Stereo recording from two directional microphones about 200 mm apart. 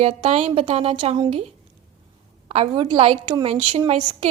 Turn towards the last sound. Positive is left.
turn(degrees=-25)  # may be behind; listen again after turning